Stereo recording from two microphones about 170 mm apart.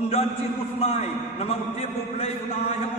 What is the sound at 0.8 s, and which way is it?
A man's voice, 35° left (ahead or behind).